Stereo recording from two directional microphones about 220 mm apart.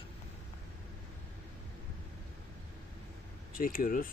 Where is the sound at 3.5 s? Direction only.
40° left (ahead or behind).